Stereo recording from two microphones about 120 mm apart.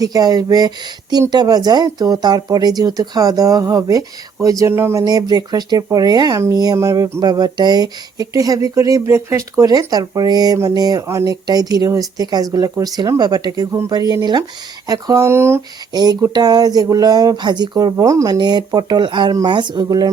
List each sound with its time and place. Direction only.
0.0 s speech: 30° right (ahead or behind)
5.0 s speech: 35° right (ahead or behind)
15.9 s speech: 35° right (ahead or behind)